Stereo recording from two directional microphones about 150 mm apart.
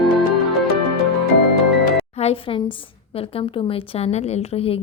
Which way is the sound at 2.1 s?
40° left (ahead or behind).